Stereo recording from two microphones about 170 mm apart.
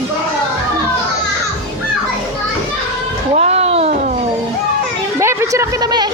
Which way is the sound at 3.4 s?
40° right (ahead or behind).